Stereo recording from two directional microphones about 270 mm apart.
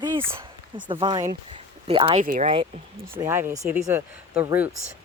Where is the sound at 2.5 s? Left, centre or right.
Centre.